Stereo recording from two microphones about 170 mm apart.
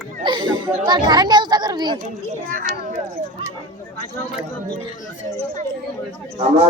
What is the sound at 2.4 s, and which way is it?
Speech, 50° right (ahead or behind).